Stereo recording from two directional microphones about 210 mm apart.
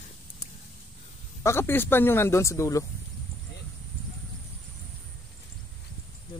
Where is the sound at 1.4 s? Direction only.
10° left (ahead or behind).